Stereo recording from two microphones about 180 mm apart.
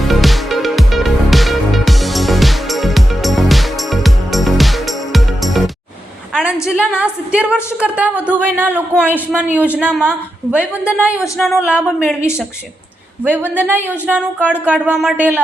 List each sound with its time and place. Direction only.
0.0 s music: centre (ahead or behind)
6.3 s a woman's voice: 5° right (ahead or behind)
13.2 s a woman's voice: 10° right (ahead or behind)